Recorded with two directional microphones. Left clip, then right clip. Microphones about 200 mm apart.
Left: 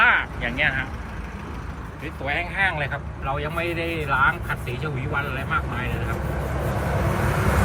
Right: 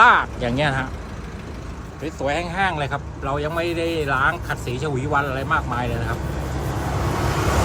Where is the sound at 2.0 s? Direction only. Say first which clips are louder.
Right 3 dB; 15° right (ahead or behind).